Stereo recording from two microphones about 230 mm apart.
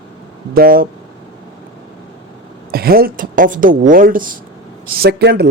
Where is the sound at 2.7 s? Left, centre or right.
Right.